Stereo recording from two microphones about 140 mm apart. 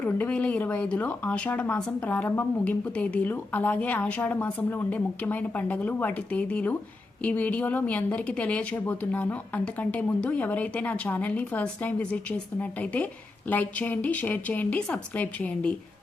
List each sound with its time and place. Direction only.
0.0 s speech: 10° left (ahead or behind)